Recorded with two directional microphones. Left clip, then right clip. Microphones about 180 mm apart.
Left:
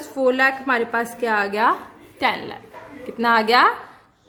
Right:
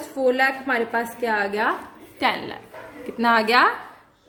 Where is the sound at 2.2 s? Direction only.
5° left (ahead or behind).